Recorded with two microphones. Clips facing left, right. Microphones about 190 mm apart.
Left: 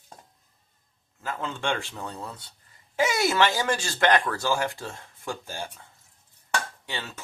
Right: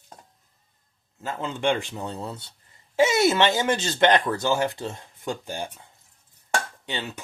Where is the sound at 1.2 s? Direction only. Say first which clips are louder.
Right 4 dB; 20° right (ahead or behind).